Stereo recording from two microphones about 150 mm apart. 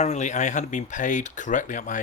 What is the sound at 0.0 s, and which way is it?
Speech, 50° left (ahead or behind).